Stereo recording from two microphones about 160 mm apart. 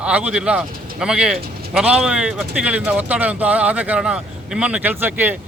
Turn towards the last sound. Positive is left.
turn(degrees=-10)  # may be behind; listen again after turning